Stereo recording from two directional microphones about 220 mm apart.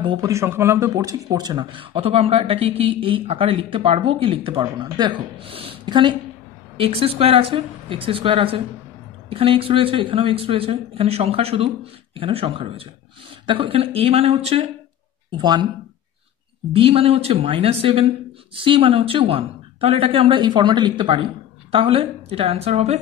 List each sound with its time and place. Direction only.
0.0 s speech: 20° right (ahead or behind)
16.7 s speech: 25° right (ahead or behind)